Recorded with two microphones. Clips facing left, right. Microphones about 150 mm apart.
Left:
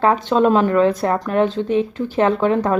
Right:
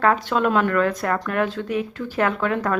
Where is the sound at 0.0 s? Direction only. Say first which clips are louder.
Left 4 dB; 25° left (ahead or behind).